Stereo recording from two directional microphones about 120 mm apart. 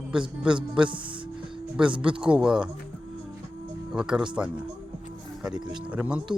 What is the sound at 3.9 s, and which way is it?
Speech, 5° right (ahead or behind).